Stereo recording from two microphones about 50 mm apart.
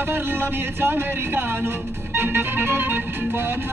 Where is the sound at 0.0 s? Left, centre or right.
Right.